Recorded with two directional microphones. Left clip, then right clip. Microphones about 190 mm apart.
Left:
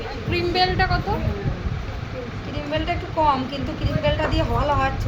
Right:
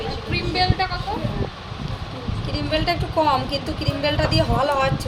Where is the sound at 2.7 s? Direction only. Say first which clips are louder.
Right 3 dB; 60° right (ahead or behind).